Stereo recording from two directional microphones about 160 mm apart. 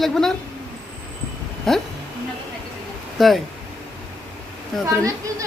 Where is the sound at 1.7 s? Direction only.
Centre (ahead or behind).